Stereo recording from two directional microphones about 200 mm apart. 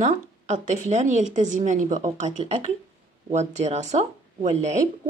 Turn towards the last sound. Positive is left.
turn(degrees=-35)  # may be behind; listen again after turning